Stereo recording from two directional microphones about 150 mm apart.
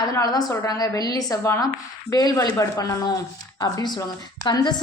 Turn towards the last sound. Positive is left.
turn(degrees=30)  # may be behind; listen again after turning